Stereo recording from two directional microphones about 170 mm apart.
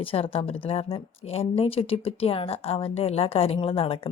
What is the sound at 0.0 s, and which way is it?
Speech, 30° left (ahead or behind).